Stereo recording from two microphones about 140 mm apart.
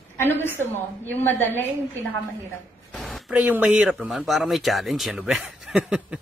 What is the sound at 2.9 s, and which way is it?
Speech, centre (ahead or behind).